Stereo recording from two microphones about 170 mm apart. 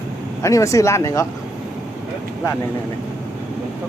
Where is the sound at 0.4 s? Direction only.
20° left (ahead or behind).